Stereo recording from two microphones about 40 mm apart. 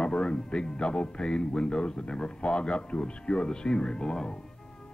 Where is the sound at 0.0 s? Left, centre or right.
Centre.